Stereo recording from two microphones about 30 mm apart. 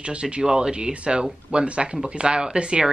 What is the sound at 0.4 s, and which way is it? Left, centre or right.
Speech, right.